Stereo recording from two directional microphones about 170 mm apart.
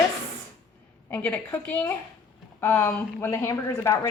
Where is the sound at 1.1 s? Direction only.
10° left (ahead or behind).